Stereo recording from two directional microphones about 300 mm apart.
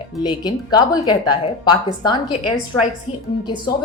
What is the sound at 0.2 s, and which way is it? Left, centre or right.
A woman's voice, centre.